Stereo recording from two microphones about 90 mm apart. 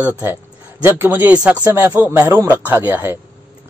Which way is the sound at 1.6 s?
25° right (ahead or behind).